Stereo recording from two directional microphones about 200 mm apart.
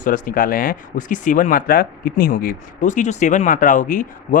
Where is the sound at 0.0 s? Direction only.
45° left (ahead or behind).